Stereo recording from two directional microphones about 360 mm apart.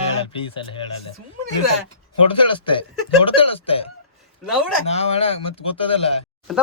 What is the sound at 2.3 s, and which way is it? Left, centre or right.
Speech, centre.